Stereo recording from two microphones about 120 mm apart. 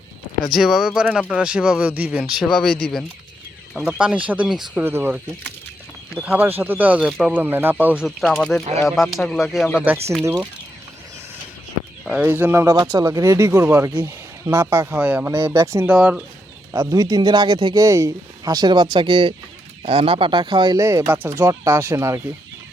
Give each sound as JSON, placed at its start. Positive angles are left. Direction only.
{"t": 0.4, "sound": "speech", "side_deg": 0}
{"t": 2.5, "sound": "speech", "side_deg": 5}
{"t": 3.8, "sound": "speech", "side_deg": -10}
{"t": 7.4, "sound": "speech", "side_deg": -15}
{"t": 8.0, "sound": "speech", "side_deg": 0}
{"t": 12.0, "sound": "speech", "side_deg": -10}
{"t": 15.9, "sound": "speech", "side_deg": -10}
{"t": 16.7, "sound": "speech", "side_deg": -25}
{"t": 17.8, "sound": "speech", "side_deg": -30}
{"t": 20.7, "sound": "speech", "side_deg": -25}